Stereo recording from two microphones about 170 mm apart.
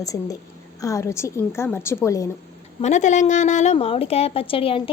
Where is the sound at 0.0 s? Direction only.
20° left (ahead or behind).